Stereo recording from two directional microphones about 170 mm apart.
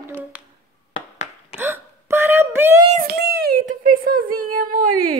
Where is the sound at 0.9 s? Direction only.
35° left (ahead or behind).